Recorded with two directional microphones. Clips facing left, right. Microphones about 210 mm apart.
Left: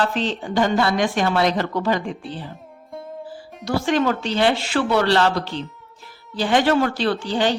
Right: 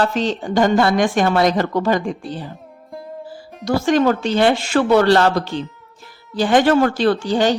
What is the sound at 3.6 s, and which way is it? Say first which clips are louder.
A woman's voice: right 4 dB; 45° right (ahead or behind).